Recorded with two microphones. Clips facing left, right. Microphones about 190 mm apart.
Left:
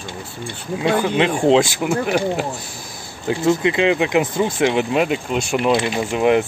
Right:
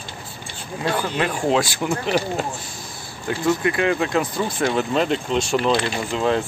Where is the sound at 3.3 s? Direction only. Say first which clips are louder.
Left 3 dB; 20° left (ahead or behind).